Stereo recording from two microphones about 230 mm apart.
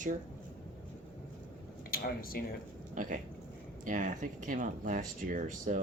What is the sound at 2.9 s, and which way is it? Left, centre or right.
Speech, right.